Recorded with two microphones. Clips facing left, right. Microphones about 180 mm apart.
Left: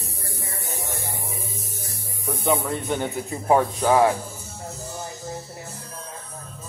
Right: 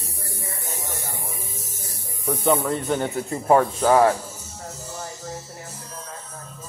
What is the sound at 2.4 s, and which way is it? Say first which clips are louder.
A man's voice: right 2 dB; 5° left (ahead or behind).